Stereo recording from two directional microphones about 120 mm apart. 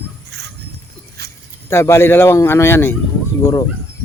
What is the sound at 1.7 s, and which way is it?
Speech, 20° left (ahead or behind).